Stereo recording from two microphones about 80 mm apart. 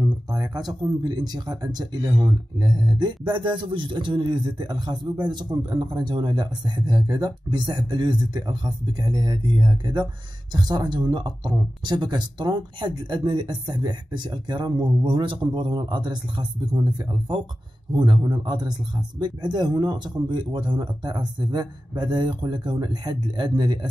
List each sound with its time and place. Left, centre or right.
0.3 s speech: right
17.9 s speech: right